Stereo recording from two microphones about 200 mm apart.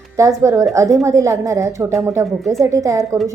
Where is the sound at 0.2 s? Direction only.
15° right (ahead or behind).